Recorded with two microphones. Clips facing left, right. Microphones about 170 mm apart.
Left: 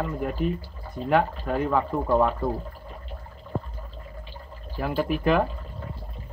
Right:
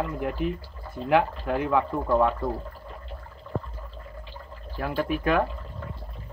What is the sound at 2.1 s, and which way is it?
Speech, 15° left (ahead or behind).